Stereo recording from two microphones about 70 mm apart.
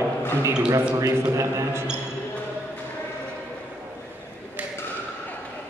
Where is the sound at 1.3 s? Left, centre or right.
Right.